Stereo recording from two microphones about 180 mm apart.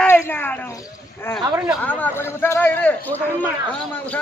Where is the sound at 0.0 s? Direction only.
10° left (ahead or behind).